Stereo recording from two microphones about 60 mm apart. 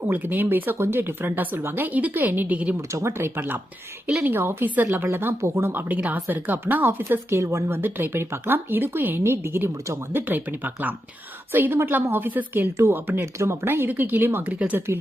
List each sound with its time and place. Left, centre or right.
0.0 s a woman's voice: right
3.1 s a woman's voice: right
5.9 s a woman's voice: right
6.8 s speech: right
7.8 s a woman's voice: right
12.7 s a woman's voice: right
14.5 s speech: right